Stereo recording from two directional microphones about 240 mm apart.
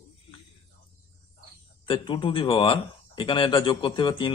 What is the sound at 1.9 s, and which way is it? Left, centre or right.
Speech, left.